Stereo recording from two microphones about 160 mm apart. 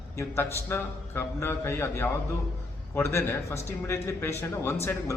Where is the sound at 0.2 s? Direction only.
15° left (ahead or behind).